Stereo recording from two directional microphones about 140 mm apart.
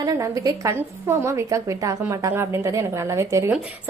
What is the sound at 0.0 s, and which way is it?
A woman's voice, 25° right (ahead or behind).